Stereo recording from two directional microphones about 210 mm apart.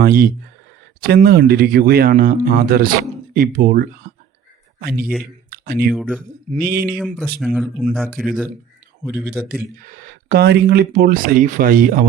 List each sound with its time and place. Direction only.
0.0 s speech: 45° right (ahead or behind)
5.5 s a sound: 45° right (ahead or behind)
5.9 s speech: centre (ahead or behind)
6.5 s speech: 45° right (ahead or behind)
7.3 s speech: centre (ahead or behind)
9.0 s speech: 10° right (ahead or behind)
9.6 s speech: 40° right (ahead or behind)